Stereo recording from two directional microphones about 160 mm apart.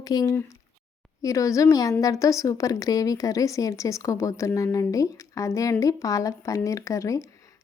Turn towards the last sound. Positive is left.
turn(degrees=20)  # may be behind; listen again after turning